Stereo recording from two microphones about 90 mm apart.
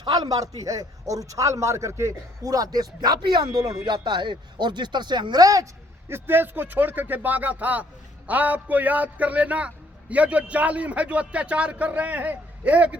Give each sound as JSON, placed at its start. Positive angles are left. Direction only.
{"t": 0.1, "sound": "a man's voice", "side_deg": -45}
{"t": 3.5, "sound": "a man's voice", "side_deg": -40}
{"t": 3.8, "sound": "speech", "side_deg": -55}
{"t": 6.1, "sound": "a man's voice", "side_deg": -25}